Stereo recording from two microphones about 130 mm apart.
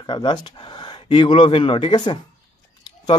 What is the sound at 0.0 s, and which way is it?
Speech, 35° left (ahead or behind).